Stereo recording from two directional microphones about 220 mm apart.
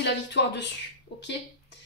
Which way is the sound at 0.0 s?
50° left (ahead or behind).